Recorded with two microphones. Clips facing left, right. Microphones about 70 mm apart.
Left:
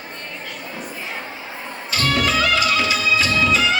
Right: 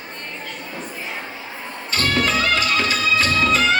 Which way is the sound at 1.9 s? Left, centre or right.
Right.